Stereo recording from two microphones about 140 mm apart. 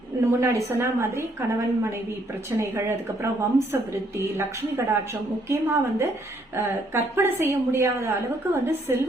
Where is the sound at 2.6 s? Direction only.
20° right (ahead or behind).